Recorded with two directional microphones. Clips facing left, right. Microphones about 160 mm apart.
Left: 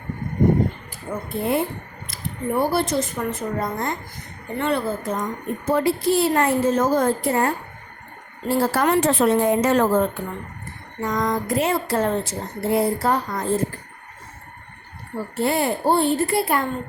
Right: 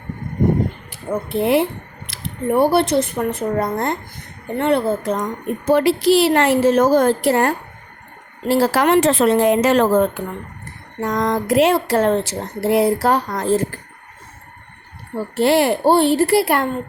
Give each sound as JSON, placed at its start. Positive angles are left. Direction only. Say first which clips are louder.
{"t": 0.9, "sound": "speech", "louder": "right 6 dB", "side_deg": -80}
{"t": 5.6, "sound": "speech", "louder": "right 5 dB", "side_deg": -90}
{"t": 11.0, "sound": "speech", "louder": "right 3 dB", "side_deg": -65}
{"t": 15.4, "sound": "speech", "louder": "right 6 dB", "side_deg": -80}